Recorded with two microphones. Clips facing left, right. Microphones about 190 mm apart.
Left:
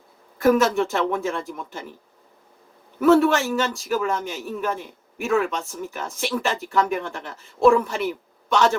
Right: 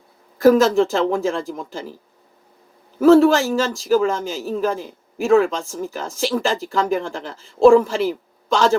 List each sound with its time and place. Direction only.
0.3 s speech: 30° right (ahead or behind)
3.0 s a man's voice: 30° right (ahead or behind)